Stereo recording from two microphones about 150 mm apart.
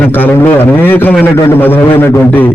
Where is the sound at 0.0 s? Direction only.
15° left (ahead or behind).